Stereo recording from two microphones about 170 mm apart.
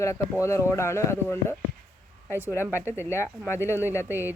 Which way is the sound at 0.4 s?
15° left (ahead or behind).